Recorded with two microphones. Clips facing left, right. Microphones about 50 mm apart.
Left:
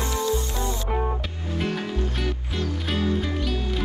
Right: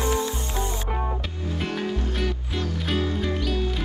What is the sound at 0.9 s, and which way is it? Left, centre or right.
Music, centre.